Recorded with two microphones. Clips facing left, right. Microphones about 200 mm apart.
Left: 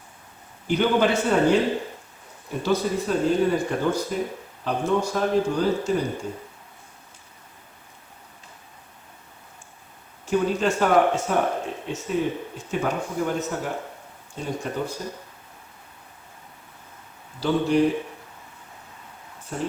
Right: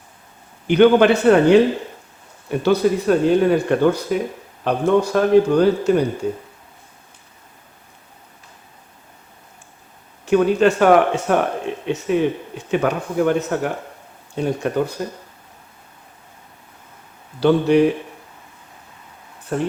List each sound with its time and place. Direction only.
0.7 s a man's voice: 70° right (ahead or behind)
10.2 s a man's voice: 70° right (ahead or behind)
17.4 s speech: 65° right (ahead or behind)
19.5 s a man's voice: 65° right (ahead or behind)